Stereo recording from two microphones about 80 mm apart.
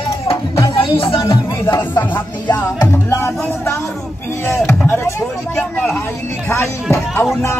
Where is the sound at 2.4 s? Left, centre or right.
Left.